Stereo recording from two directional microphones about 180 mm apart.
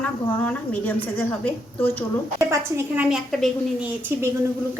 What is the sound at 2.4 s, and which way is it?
A woman's voice, 15° right (ahead or behind).